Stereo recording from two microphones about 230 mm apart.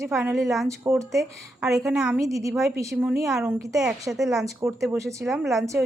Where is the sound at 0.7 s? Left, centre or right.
Centre.